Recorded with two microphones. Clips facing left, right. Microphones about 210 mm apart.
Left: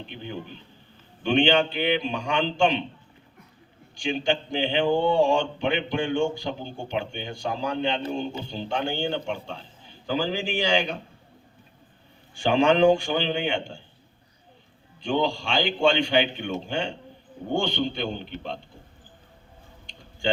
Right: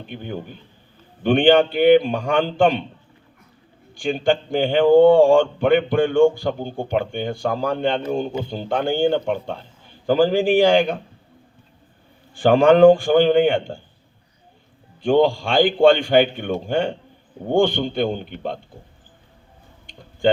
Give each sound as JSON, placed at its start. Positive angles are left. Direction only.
{"t": 0.1, "sound": "a man's voice", "side_deg": -50}
{"t": 3.9, "sound": "a man's voice", "side_deg": -50}
{"t": 12.4, "sound": "a man's voice", "side_deg": -55}
{"t": 15.0, "sound": "a man's voice", "side_deg": -50}